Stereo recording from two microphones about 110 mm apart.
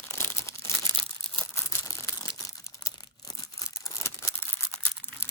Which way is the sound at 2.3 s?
30° left (ahead or behind).